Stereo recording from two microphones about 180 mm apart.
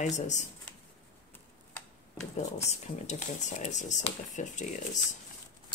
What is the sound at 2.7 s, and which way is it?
Speech, 40° left (ahead or behind).